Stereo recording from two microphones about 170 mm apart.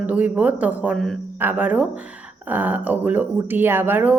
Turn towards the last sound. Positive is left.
turn(degrees=-10)  # may be behind; listen again after turning